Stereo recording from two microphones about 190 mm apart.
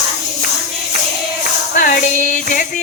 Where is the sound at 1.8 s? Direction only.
45° left (ahead or behind).